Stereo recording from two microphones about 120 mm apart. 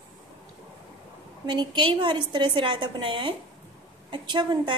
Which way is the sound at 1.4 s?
40° right (ahead or behind).